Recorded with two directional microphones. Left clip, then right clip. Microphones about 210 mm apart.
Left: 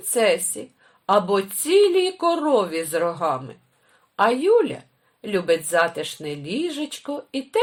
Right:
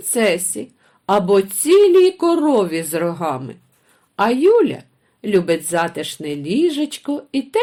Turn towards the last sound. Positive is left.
turn(degrees=-30)  # may be behind; listen again after turning